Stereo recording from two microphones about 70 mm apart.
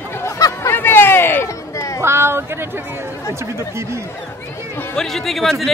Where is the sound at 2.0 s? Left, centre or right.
Right.